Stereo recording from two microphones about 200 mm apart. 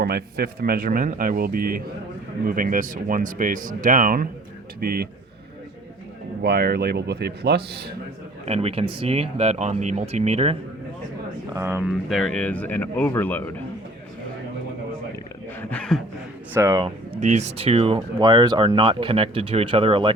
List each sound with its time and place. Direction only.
0.0 s speech: 50° right (ahead or behind)
6.4 s speech: 50° right (ahead or behind)
8.4 s speech: 30° right (ahead or behind)
11.5 s speech: 10° right (ahead or behind)
11.9 s speech: centre (ahead or behind)
15.7 s a sound: 5° left (ahead or behind)
16.6 s speech: 20° right (ahead or behind)
17.2 s speech: 35° right (ahead or behind)